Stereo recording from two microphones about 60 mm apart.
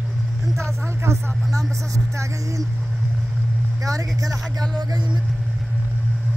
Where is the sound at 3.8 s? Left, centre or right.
Right.